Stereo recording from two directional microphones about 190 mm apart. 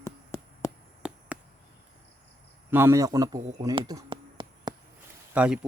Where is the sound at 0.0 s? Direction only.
15° left (ahead or behind).